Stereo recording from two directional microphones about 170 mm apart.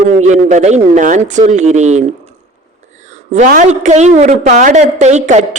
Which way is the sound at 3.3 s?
45° right (ahead or behind).